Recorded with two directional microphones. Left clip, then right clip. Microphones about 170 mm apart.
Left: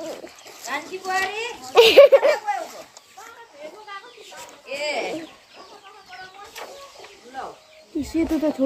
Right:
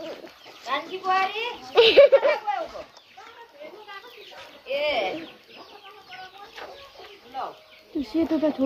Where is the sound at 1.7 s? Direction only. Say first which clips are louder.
Left 4 dB; 90° left.